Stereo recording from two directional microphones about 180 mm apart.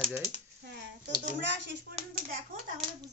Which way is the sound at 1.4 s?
75° right (ahead or behind).